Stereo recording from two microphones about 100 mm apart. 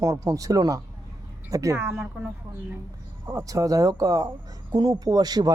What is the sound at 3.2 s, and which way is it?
Speech, 35° right (ahead or behind).